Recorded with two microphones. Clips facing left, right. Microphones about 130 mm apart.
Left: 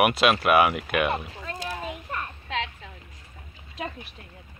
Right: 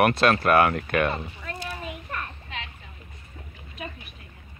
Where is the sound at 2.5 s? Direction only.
90° left.